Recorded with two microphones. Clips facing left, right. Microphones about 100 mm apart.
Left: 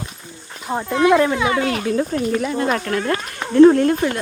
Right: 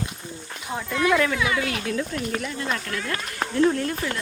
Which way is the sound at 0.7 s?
35° left (ahead or behind).